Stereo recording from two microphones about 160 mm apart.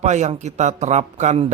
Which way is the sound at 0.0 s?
45° right (ahead or behind).